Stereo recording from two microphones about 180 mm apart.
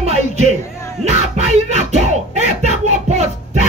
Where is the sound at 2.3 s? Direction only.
40° right (ahead or behind).